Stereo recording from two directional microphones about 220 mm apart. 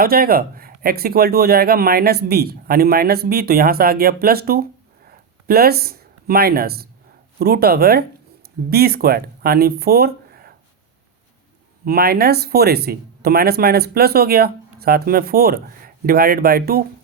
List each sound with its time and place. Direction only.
0.0 s speech: 45° right (ahead or behind)
5.0 s a sound: 45° right (ahead or behind)
7.3 s speech: 45° right (ahead or behind)
11.9 s speech: 45° right (ahead or behind)